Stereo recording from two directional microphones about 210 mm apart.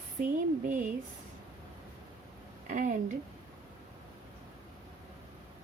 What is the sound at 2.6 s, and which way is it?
Speech, 40° right (ahead or behind).